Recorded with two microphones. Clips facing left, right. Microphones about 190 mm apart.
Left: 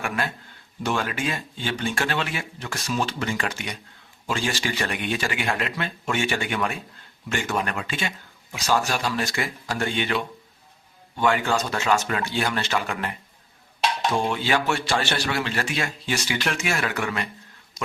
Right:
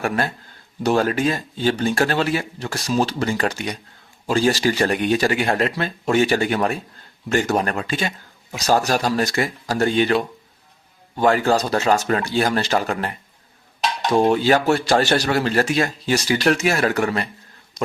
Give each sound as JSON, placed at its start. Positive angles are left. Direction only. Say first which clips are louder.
{"t": 0.8, "sound": "speech", "louder": "right 8 dB", "side_deg": -35}
{"t": 17.8, "sound": "speech", "louder": "right 7 dB", "side_deg": 0}